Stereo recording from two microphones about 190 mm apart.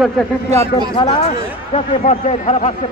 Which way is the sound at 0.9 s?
30° left (ahead or behind).